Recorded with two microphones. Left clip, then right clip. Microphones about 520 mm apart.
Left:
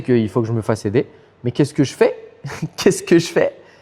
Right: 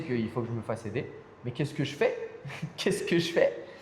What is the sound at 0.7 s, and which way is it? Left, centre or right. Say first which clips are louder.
Speech: left 18 dB; left.